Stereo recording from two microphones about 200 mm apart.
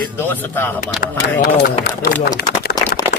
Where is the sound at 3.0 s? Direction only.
20° left (ahead or behind).